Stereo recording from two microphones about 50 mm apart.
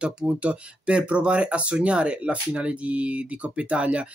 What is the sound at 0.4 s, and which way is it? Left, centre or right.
Speech, right.